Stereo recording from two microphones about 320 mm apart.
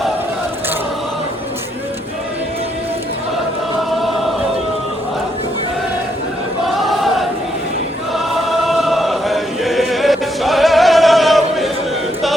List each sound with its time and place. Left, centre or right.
6.8 s choir: centre